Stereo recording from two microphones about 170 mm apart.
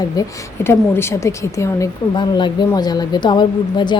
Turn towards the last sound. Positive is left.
turn(degrees=25)  # may be behind; listen again after turning